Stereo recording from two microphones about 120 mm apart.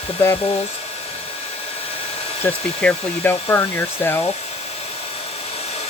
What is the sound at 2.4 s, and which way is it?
Speech, 15° left (ahead or behind).